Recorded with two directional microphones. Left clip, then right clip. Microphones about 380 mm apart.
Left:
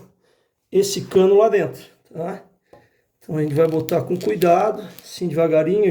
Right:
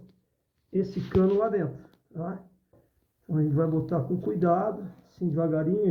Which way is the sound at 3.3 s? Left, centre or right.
Left.